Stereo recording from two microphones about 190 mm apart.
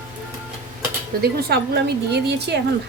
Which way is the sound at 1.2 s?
55° right (ahead or behind).